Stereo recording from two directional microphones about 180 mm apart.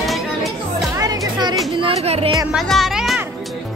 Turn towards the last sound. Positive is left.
turn(degrees=0)  # may be behind; listen again after turning